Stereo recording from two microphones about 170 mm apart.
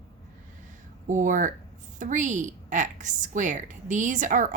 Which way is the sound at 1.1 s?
50° right (ahead or behind).